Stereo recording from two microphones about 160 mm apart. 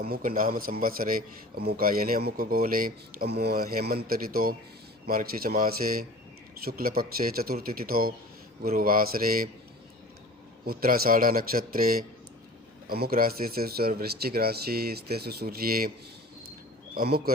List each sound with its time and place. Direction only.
0.0 s a man's voice: 60° right (ahead or behind)
10.7 s a man's voice: 70° right (ahead or behind)
16.9 s speech: 70° right (ahead or behind)